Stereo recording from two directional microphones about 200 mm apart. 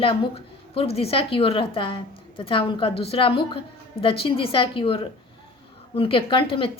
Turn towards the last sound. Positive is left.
turn(degrees=25)  # may be behind; listen again after turning